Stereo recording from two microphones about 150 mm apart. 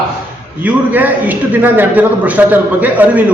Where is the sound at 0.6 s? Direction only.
10° right (ahead or behind).